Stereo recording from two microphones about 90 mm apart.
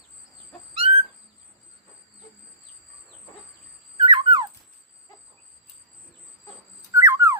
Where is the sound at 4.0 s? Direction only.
65° right (ahead or behind).